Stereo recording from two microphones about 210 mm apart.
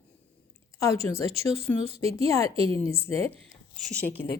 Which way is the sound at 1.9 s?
30° right (ahead or behind).